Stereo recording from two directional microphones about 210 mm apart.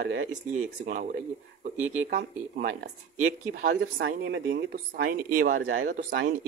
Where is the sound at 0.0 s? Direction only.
55° right (ahead or behind).